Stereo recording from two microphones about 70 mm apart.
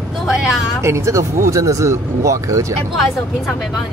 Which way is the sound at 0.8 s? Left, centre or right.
Right.